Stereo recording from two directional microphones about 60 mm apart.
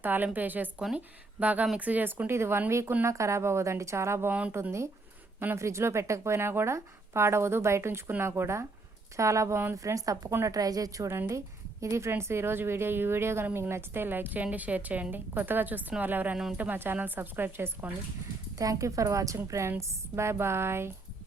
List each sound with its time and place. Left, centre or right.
0.0 s a woman's voice: right
4.3 s speech: right
5.5 s a woman's voice: right
9.1 s speech: right
9.7 s a woman's voice: right
10.4 s a woman's voice: right
11.1 s a woman's voice: right
18.5 s a woman's voice: right
19.5 s a woman's voice: right